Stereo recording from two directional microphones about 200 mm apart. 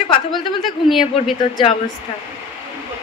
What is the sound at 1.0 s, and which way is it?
Speech, 25° left (ahead or behind).